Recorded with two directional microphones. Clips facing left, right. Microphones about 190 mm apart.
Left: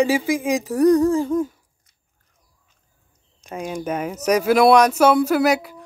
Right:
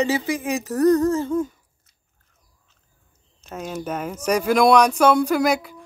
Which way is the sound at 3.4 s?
10° left (ahead or behind).